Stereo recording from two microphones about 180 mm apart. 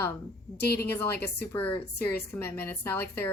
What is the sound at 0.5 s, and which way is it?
Speech, 60° left (ahead or behind).